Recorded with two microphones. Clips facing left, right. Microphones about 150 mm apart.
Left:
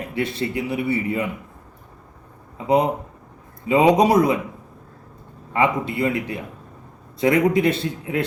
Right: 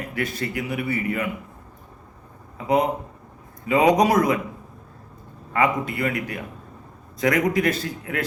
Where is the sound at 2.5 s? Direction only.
25° left (ahead or behind).